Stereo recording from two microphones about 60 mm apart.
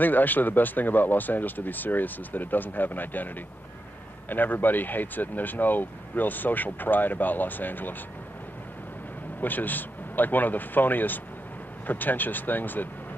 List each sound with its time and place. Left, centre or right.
0.0 s speech: left
9.4 s speech: left